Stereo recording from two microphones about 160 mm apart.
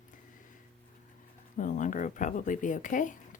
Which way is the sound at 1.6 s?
50° left (ahead or behind).